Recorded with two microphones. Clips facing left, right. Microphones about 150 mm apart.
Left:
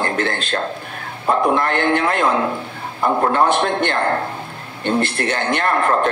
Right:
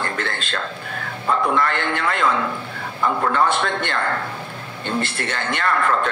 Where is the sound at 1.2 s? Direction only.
30° left (ahead or behind).